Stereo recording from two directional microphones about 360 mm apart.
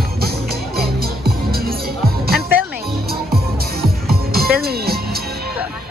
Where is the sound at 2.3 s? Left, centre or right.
Centre.